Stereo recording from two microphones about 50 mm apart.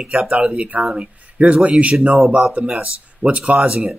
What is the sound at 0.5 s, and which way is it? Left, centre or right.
Speech, right.